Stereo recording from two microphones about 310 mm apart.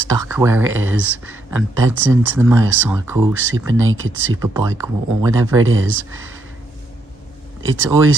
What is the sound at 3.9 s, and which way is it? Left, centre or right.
Speech, right.